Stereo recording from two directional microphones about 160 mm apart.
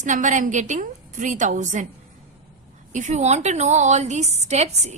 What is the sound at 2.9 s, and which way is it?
A woman's voice, 50° right (ahead or behind).